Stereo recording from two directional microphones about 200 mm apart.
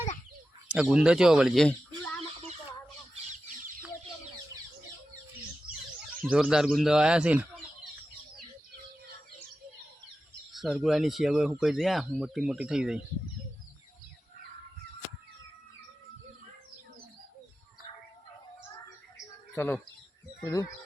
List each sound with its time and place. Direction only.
0.7 s speech: 5° right (ahead or behind)
6.2 s speech: 5° right (ahead or behind)
10.5 s speech: centre (ahead or behind)
19.1 s bird: 10° left (ahead or behind)
20.4 s speech: 15° left (ahead or behind)